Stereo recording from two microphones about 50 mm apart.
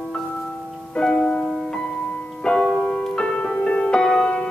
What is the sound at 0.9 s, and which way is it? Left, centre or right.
Music, centre.